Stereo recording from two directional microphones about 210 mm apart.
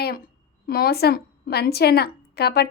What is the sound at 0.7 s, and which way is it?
A woman's voice, 50° left (ahead or behind).